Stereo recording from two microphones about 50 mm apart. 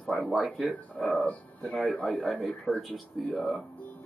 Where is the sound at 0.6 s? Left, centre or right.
Left.